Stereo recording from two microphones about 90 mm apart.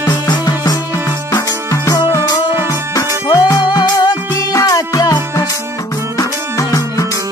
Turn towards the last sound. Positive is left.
turn(degrees=40)  # may be behind; listen again after turning